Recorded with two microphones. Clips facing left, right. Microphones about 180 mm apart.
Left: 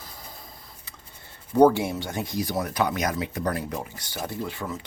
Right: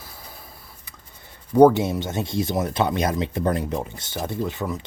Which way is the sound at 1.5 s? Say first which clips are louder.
Right 4 dB; 10° right (ahead or behind).